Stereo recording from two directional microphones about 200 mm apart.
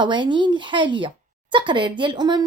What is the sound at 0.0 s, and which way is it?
A woman's voice, 25° right (ahead or behind).